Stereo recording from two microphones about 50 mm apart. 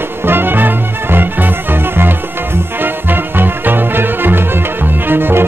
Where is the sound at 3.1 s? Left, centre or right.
Right.